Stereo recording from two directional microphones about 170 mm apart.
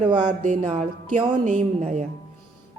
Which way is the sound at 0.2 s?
45° right (ahead or behind).